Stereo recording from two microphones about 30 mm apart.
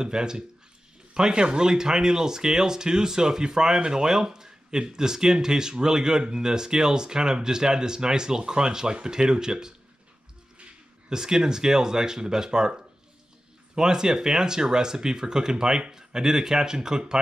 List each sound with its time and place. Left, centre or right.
0.0 s speech: right
11.1 s speech: right
13.7 s speech: right